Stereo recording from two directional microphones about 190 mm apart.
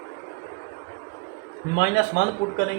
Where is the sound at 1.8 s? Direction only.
60° left (ahead or behind).